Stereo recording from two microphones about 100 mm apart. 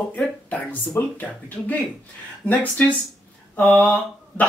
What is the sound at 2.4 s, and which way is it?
Speech, 15° left (ahead or behind).